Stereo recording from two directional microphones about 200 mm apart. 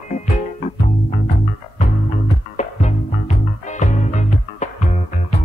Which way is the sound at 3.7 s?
35° left (ahead or behind).